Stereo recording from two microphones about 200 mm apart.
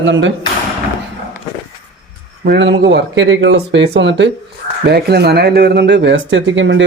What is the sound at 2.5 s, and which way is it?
Speech, 60° right (ahead or behind).